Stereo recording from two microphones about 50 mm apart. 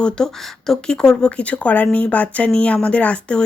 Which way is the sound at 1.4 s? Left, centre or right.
Left.